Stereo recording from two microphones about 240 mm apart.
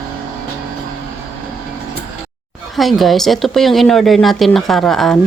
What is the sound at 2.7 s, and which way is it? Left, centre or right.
Speech, centre.